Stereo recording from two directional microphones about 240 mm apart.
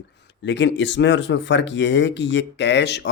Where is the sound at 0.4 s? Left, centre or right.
Left.